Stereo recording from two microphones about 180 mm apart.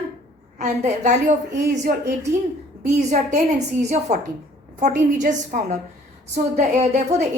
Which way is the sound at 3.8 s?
40° right (ahead or behind).